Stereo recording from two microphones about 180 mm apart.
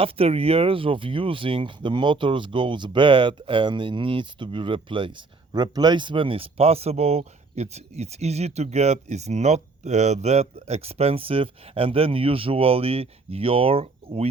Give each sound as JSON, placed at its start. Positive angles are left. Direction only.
{"t": 0.0, "sound": "speech", "side_deg": -30}